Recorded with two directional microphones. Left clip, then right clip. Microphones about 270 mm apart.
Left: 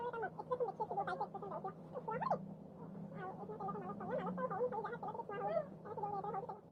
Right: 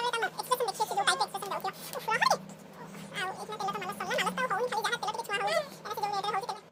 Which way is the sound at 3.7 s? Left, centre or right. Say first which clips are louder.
Right 11 dB; centre.